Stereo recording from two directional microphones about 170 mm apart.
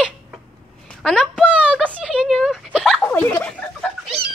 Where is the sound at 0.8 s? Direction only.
Centre (ahead or behind).